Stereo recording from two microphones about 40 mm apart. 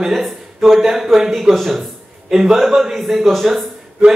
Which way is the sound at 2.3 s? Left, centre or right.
Centre.